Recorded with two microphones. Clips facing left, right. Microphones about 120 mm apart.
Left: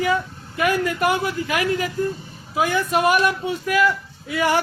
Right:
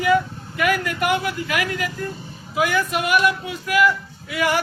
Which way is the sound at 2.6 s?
30° left (ahead or behind).